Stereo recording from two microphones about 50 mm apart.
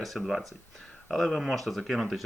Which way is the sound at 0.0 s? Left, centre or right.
Centre.